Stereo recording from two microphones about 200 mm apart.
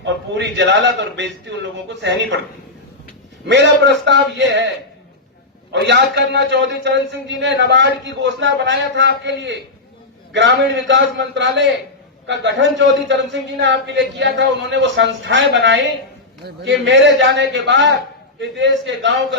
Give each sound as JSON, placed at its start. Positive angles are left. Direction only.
{"t": 0.0, "sound": "a man's voice", "side_deg": -60}
{"t": 3.4, "sound": "a man's voice", "side_deg": -60}
{"t": 5.7, "sound": "a man's voice", "side_deg": -60}